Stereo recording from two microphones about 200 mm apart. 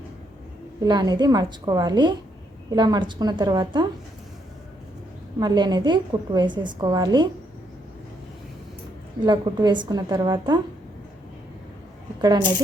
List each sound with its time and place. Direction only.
0.8 s a woman's voice: 20° right (ahead or behind)
5.4 s a woman's voice: 20° right (ahead or behind)
9.2 s a woman's voice: 20° right (ahead or behind)
12.2 s a woman's voice: 20° right (ahead or behind)